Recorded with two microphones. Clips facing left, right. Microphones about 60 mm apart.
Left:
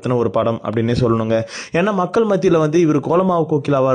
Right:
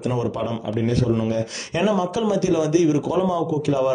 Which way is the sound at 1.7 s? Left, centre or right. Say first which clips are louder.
Left 5 dB; left.